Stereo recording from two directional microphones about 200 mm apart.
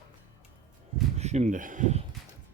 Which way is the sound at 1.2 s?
35° right (ahead or behind).